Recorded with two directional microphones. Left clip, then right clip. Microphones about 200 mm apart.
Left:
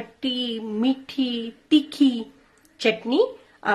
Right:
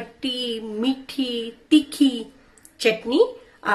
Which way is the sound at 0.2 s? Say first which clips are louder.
Right 1 dB; 45° left (ahead or behind).